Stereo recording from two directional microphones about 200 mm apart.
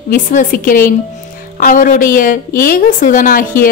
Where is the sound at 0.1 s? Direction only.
40° left (ahead or behind).